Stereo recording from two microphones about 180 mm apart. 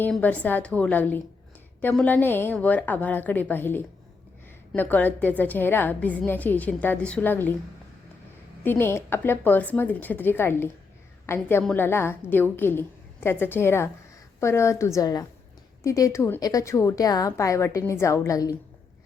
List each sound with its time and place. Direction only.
0.0 s a woman's voice: 10° left (ahead or behind)
8.6 s a woman's voice: 10° left (ahead or behind)